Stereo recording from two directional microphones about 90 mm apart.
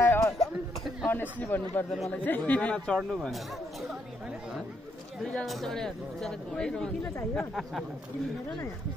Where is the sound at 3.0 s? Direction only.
10° right (ahead or behind).